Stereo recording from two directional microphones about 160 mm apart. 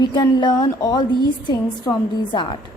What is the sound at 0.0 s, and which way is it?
A woman's voice, 25° left (ahead or behind).